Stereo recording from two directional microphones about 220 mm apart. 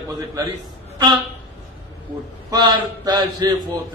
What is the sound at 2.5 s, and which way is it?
A man's voice, 20° right (ahead or behind).